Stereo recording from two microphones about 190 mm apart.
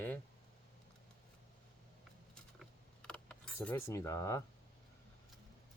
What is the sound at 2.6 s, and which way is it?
Mechanisms, 5° left (ahead or behind).